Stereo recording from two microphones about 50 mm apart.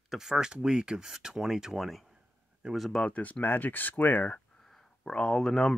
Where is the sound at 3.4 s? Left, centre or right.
Left.